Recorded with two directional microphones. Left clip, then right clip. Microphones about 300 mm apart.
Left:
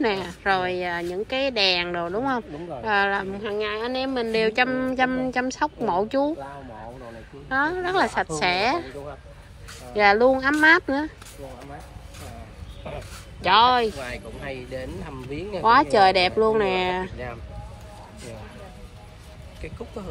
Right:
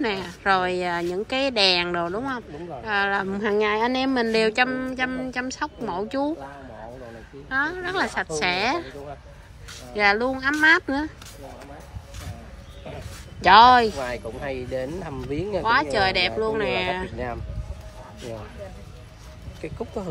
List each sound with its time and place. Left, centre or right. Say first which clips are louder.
0.0 s a woman's voice: left 1 dB; centre
7.4 s speech: left 2 dB; centre
13.4 s a woman's voice: right 5 dB; centre
14.1 s speech: right 4 dB; right
15.6 s speech: left 5 dB; centre
19.6 s speech: right 4 dB; right